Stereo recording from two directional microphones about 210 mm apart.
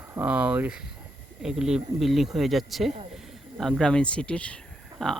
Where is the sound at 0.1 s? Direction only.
10° right (ahead or behind).